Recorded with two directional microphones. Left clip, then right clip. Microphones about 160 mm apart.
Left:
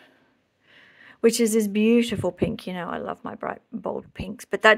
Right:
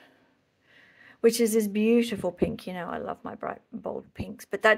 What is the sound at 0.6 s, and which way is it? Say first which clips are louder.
Speech: left 4 dB; 35° left (ahead or behind).